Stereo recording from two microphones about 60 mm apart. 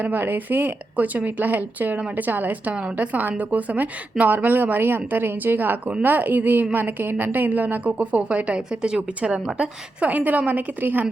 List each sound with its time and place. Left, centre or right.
0.0 s a woman's voice: right